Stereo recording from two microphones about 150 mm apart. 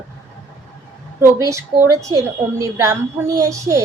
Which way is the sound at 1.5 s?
20° right (ahead or behind).